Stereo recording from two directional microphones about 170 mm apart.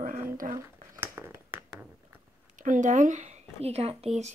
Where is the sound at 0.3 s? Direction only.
55° right (ahead or behind).